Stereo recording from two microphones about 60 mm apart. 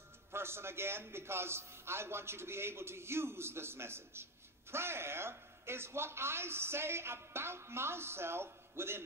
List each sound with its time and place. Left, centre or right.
0.3 s a man's voice: right